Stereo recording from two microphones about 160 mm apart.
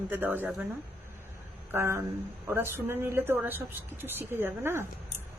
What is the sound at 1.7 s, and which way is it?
Speech, 15° right (ahead or behind).